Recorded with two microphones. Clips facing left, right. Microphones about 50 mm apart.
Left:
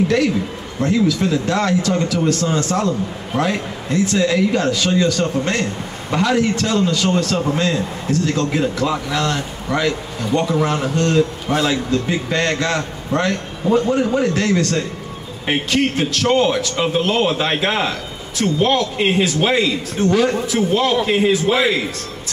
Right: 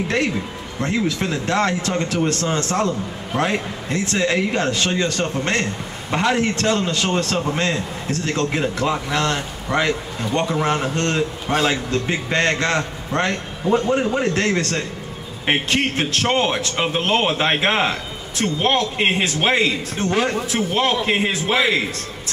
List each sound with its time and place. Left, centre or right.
0.7 s a man's voice: right
11.4 s a man's voice: centre
11.7 s a man's voice: right
14.3 s a man's voice: right